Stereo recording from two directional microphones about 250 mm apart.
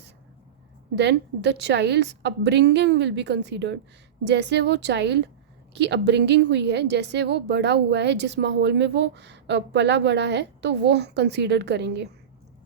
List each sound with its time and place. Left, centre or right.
0.9 s a woman's voice: right